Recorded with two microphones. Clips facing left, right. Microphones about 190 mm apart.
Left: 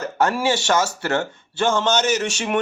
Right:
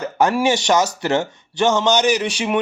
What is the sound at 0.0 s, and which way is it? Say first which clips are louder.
Speech: right 3 dB; 15° right (ahead or behind).